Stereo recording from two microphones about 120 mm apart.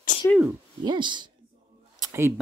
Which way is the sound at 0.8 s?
40° right (ahead or behind).